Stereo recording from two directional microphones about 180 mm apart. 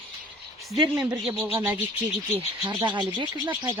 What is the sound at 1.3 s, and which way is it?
Speech, 5° right (ahead or behind).